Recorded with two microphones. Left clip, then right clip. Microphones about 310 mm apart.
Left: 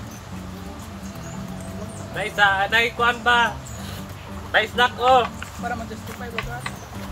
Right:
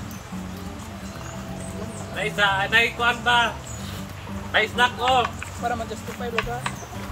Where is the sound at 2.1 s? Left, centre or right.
Centre.